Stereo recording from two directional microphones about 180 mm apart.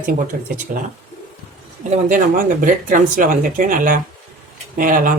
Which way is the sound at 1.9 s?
45° right (ahead or behind).